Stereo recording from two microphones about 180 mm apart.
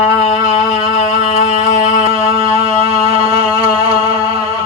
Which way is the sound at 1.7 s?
35° right (ahead or behind).